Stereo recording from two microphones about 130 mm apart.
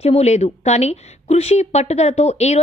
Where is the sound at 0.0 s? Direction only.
55° left (ahead or behind).